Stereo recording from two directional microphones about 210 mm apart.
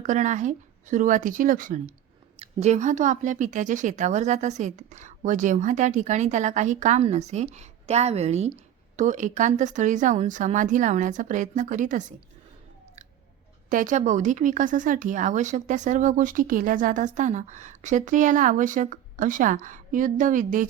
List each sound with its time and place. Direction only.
0.0 s a woman's voice: 35° right (ahead or behind)
13.7 s a woman's voice: 35° right (ahead or behind)